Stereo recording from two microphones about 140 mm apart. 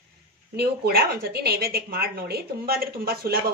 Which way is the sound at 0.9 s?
90° right.